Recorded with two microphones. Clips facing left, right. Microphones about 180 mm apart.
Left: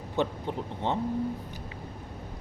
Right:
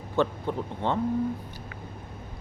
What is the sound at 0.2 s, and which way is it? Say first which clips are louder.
Speech: right 3 dB; 20° left (ahead or behind).